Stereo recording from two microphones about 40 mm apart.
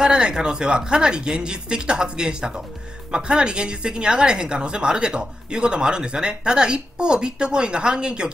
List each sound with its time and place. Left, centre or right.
0.0 s speech: centre